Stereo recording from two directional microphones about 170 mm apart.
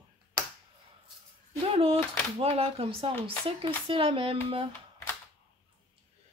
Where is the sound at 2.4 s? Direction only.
35° right (ahead or behind).